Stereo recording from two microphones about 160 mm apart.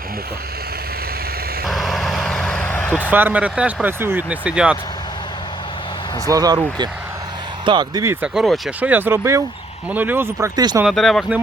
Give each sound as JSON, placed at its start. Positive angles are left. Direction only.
{"t": 1.6, "sound": "vehicle", "side_deg": 0}
{"t": 3.1, "sound": "speech", "side_deg": -10}
{"t": 6.2, "sound": "speech", "side_deg": -20}
{"t": 7.6, "sound": "speech", "side_deg": -30}
{"t": 8.2, "sound": "speech", "side_deg": 0}
{"t": 10.5, "sound": "speech", "side_deg": -25}
{"t": 10.8, "sound": "speech", "side_deg": 0}